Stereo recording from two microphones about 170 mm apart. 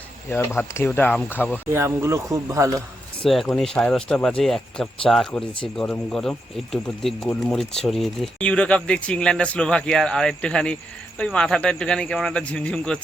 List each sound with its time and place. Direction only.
0.3 s speech: 15° left (ahead or behind)
1.7 s speech: 15° right (ahead or behind)
3.2 s speech: centre (ahead or behind)